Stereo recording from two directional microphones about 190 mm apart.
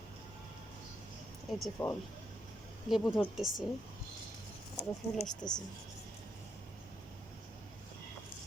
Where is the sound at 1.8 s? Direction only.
20° left (ahead or behind).